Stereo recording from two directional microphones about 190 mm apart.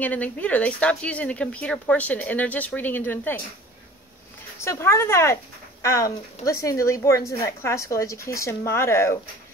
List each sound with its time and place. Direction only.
0.0 s speech: 10° left (ahead or behind)
4.6 s speech: 15° left (ahead or behind)